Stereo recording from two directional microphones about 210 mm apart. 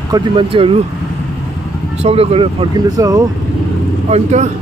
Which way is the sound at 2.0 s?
25° right (ahead or behind).